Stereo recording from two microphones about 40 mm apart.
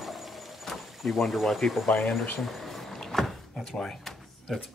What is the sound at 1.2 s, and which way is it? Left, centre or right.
Speech, centre.